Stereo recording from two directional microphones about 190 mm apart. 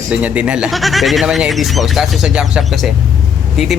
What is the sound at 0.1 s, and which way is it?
A man's voice, 5° right (ahead or behind).